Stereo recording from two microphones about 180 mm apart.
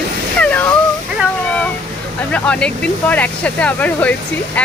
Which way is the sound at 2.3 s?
5° left (ahead or behind).